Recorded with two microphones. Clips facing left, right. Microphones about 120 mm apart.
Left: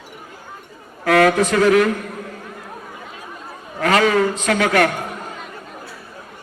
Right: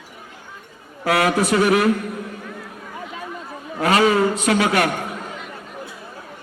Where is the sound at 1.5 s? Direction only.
25° right (ahead or behind).